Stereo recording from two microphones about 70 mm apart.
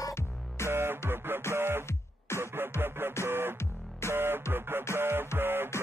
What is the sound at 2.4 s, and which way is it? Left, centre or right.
Music, right.